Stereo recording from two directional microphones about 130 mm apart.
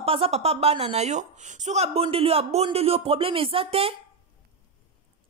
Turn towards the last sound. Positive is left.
turn(degrees=-50)  # may be behind; listen again after turning